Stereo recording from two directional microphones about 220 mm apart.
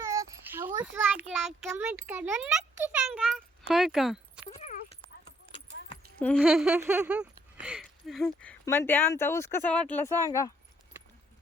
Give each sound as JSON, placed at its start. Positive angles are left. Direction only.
{"t": 0.0, "sound": "a sound", "side_deg": -15}
{"t": 1.3, "sound": "speech", "side_deg": 0}
{"t": 4.4, "sound": "horse", "side_deg": 35}
{"t": 6.1, "sound": "speech", "side_deg": 5}